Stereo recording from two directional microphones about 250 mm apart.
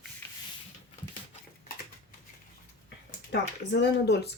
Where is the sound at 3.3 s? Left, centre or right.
Left.